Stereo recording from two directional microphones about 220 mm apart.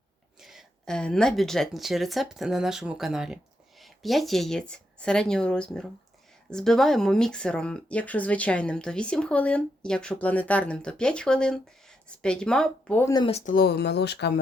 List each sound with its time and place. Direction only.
0.3 s speech: centre (ahead or behind)
13.2 s speech: 30° left (ahead or behind); by 14.3 s 50° left (ahead or behind)